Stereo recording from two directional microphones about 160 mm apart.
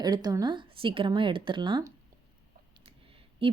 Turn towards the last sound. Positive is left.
turn(degrees=-35)  # may be behind; listen again after turning